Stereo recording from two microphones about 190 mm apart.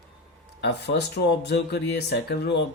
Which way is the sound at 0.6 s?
65° left (ahead or behind).